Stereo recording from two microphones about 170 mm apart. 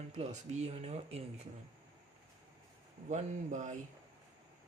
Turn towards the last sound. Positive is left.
turn(degrees=-45)  # may be behind; listen again after turning